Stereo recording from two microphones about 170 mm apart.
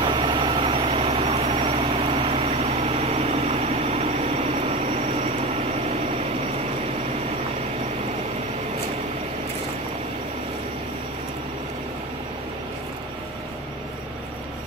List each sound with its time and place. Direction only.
0.0 s vehicle: 30° right (ahead or behind)